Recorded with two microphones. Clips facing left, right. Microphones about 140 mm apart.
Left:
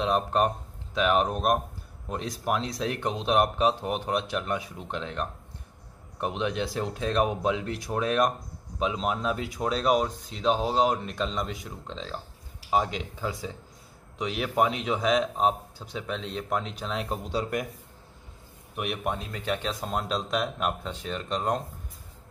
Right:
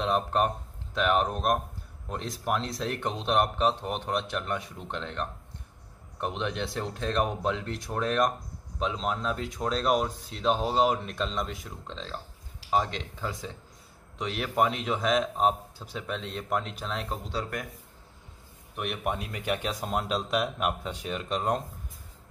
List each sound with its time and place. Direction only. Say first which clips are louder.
0.0 s a man's voice: left 2 dB; centre (ahead or behind); by 17.6 s 15° left (ahead or behind)
18.8 s a man's voice: left 1 dB; centre (ahead or behind)
19.1 s speech: even; 10° right (ahead or behind)